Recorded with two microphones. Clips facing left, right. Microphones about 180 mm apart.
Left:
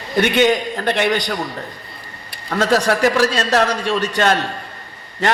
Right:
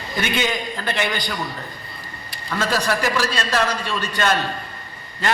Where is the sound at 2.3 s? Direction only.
65° left (ahead or behind).